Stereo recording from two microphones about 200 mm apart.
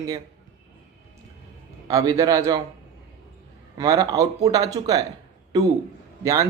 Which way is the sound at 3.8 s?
15° right (ahead or behind).